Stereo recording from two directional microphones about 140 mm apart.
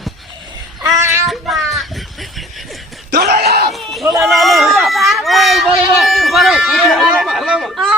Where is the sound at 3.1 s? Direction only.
90° right.